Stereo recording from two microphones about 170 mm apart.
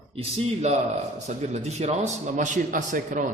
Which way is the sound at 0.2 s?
40° right (ahead or behind).